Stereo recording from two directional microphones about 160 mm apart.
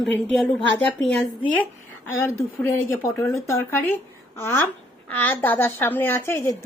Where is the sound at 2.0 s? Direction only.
15° left (ahead or behind).